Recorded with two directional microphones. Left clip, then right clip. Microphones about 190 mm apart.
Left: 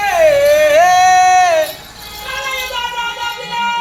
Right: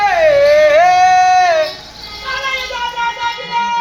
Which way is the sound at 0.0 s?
15° left (ahead or behind).